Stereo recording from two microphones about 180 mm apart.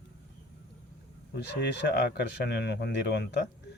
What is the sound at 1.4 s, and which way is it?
Speech, 70° left (ahead or behind).